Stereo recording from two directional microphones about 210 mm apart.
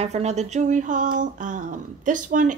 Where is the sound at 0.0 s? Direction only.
30° right (ahead or behind).